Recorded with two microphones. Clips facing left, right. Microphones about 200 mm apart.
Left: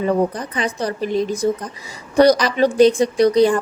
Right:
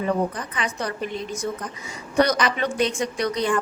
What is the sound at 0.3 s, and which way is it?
Speech, 35° left (ahead or behind).